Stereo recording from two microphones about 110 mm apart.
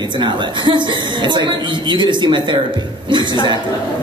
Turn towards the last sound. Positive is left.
turn(degrees=-45)  # may be behind; listen again after turning